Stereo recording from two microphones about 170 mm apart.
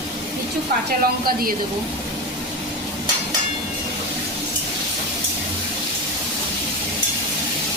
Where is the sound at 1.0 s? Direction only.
60° right (ahead or behind).